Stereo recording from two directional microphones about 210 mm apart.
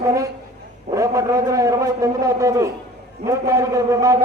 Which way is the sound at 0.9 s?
15° right (ahead or behind).